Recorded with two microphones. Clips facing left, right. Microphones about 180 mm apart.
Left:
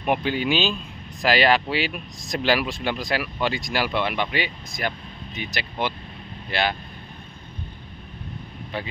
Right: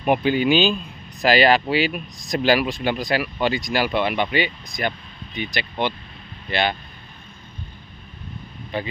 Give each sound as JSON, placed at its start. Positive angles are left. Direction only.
{"t": 0.0, "sound": "speech", "side_deg": 0}
{"t": 8.7, "sound": "speech", "side_deg": 0}